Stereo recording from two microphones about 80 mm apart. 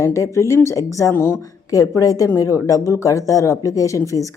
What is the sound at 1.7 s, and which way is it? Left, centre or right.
Speech, left.